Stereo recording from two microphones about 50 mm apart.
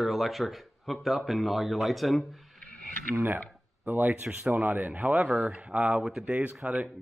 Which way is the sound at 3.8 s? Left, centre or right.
Right.